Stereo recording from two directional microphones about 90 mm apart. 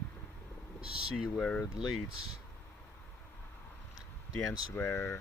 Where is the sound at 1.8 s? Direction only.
Centre (ahead or behind).